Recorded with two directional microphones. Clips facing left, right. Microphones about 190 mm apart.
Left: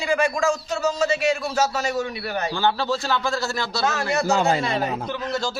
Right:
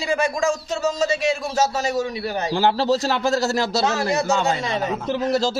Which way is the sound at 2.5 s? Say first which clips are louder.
Right 5 dB; 35° right (ahead or behind).